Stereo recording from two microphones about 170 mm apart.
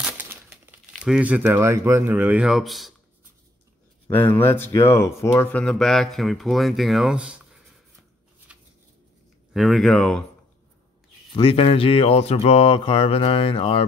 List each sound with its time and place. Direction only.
0.0 s speech: 10° right (ahead or behind)
4.1 s speech: 10° left (ahead or behind); by 7.6 s 5° right (ahead or behind)
8.5 s a sound: 5° right (ahead or behind)
9.5 s speech: centre (ahead or behind)
11.3 s mantra: 35° left (ahead or behind)